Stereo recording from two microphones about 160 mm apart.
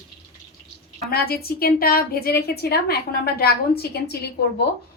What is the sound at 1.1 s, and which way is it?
A woman's voice, 75° left (ahead or behind).